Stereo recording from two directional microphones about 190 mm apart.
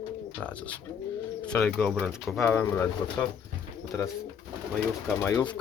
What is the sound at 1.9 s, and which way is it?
Speech, 5° right (ahead or behind).